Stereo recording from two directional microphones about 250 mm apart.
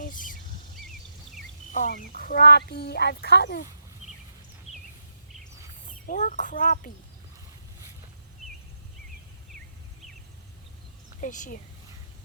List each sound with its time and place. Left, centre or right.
0.0 s a sound: left
1.7 s speech: left
5.8 s speech: left
11.2 s speech: left